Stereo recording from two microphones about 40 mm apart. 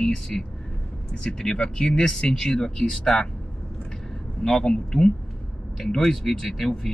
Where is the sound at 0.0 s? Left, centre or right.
Centre.